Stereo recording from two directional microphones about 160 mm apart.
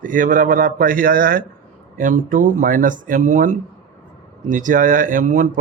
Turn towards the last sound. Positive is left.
turn(degrees=-55)  # may be behind; listen again after turning